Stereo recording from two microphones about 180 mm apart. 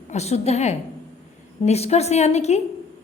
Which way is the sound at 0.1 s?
35° left (ahead or behind).